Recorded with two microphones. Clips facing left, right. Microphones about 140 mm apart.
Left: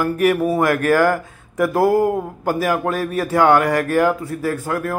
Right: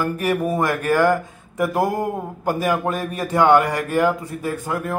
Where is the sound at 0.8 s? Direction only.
15° right (ahead or behind).